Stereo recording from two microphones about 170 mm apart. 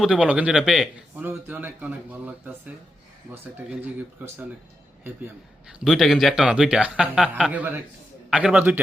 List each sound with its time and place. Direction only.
0.0 s a man's voice: 5° right (ahead or behind)
3.7 s a man's voice: 10° right (ahead or behind)
5.8 s a man's voice: centre (ahead or behind)